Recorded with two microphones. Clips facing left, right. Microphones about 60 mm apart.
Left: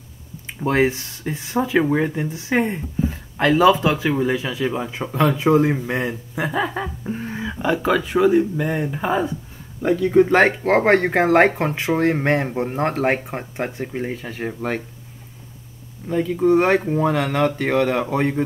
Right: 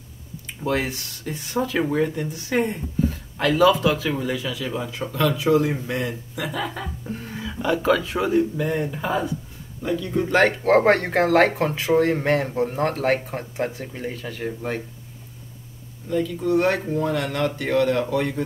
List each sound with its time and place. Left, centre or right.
0.7 s speech: left
1.3 s speech: centre
5.2 s speech: left
9.8 s a man's voice: left
10.2 s speech: left
10.6 s speech: centre
11.1 s speech: left
16.1 s speech: left